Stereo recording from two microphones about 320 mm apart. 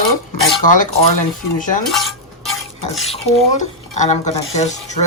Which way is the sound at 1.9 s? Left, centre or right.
Centre.